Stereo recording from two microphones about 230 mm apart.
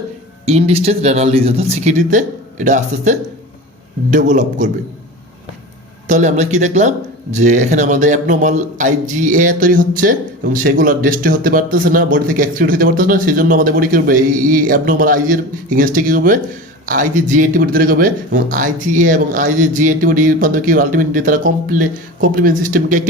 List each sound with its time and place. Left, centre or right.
0.4 s speech: right
6.1 s speech: right